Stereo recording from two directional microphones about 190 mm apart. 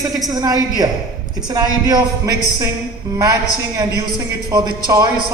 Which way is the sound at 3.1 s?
15° right (ahead or behind).